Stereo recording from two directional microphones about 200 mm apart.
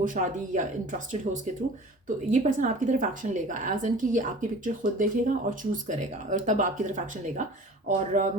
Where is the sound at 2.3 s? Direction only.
40° right (ahead or behind).